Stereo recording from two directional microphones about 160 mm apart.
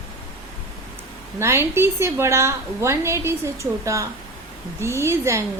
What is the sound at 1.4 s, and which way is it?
A woman's voice, 15° right (ahead or behind).